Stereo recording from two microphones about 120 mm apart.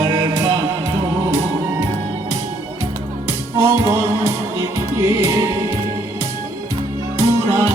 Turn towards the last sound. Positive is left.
turn(degrees=-25)  # may be behind; listen again after turning